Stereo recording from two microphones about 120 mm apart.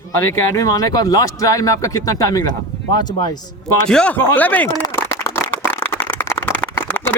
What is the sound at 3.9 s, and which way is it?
Speech, 10° left (ahead or behind).